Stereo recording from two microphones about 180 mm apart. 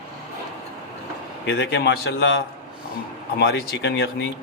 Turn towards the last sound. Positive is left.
turn(degrees=70)  # may be behind; listen again after turning